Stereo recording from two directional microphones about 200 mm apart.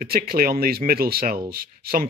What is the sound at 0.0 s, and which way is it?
Speech, 50° right (ahead or behind).